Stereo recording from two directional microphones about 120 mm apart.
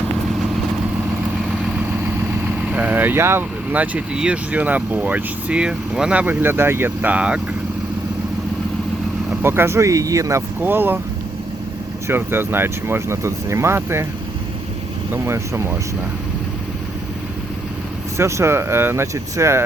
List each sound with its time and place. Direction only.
1.7 s vehicle: 15° right (ahead or behind)
3.7 s speech: 10° right (ahead or behind)
9.4 s speech: 20° right (ahead or behind)
10.6 s speech: 15° right (ahead or behind)
12.0 s speech: 20° right (ahead or behind)
15.1 s speech: 20° right (ahead or behind)
18.2 s speech: 25° right (ahead or behind)